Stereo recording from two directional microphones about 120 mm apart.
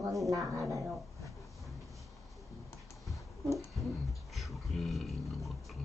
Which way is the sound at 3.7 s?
Centre (ahead or behind).